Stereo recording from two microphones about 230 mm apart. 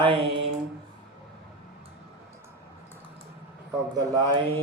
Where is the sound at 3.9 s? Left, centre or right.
Centre.